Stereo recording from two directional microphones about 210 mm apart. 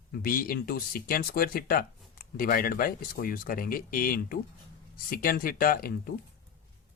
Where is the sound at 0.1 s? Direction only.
45° left (ahead or behind).